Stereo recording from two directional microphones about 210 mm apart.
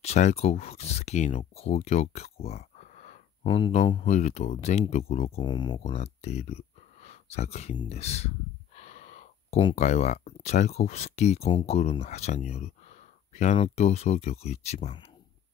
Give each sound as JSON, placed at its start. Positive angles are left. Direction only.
{"t": 0.0, "sound": "speech", "side_deg": 30}